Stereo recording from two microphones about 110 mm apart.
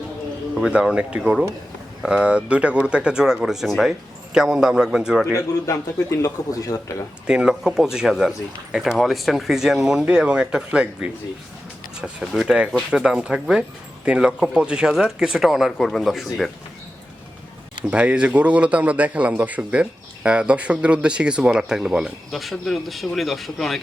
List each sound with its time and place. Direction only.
0.6 s a man's voice: 5° right (ahead or behind)
5.6 s speech: 30° left (ahead or behind)
7.3 s a man's voice: 5° right (ahead or behind)
17.9 s a man's voice: 10° right (ahead or behind)